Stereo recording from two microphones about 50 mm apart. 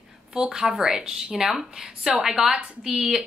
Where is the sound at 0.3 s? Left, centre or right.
Centre.